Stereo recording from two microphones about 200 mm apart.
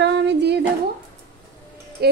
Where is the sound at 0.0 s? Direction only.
60° right (ahead or behind).